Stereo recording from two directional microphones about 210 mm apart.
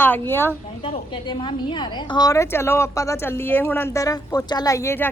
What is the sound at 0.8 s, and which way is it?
Speech, 25° left (ahead or behind).